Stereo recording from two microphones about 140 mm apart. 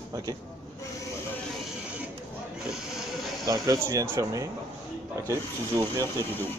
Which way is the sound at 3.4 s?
25° right (ahead or behind).